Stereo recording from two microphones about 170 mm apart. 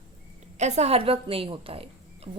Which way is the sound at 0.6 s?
40° right (ahead or behind).